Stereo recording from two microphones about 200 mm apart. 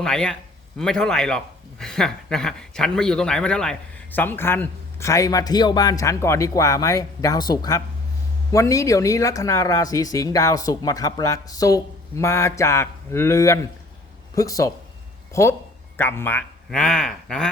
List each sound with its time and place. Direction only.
0.0 s a man's voice: 5° left (ahead or behind)